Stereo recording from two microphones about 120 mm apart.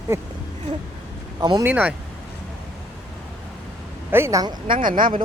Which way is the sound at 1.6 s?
15° right (ahead or behind).